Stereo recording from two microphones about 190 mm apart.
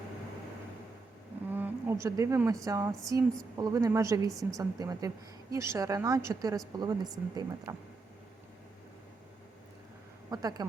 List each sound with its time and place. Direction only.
1.5 s a sound: 10° right (ahead or behind)
2.6 s a woman's voice: 15° right (ahead or behind)
10.2 s speech: 20° right (ahead or behind)